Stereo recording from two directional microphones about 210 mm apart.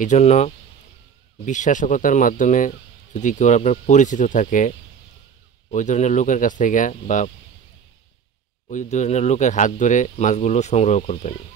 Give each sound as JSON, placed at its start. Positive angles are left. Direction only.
{"t": 0.0, "sound": "speech", "side_deg": 35}
{"t": 8.6, "sound": "speech", "side_deg": 35}